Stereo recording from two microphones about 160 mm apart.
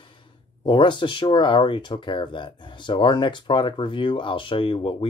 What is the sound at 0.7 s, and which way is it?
Speech, 30° left (ahead or behind).